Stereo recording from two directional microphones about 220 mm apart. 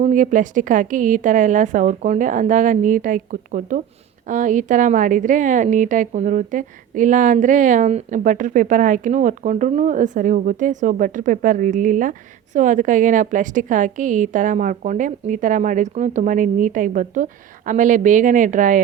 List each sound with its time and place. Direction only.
0.0 s a woman's voice: 35° right (ahead or behind)